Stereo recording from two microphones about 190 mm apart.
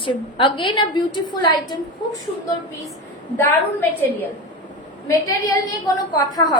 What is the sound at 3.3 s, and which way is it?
A woman's voice, 10° left (ahead or behind).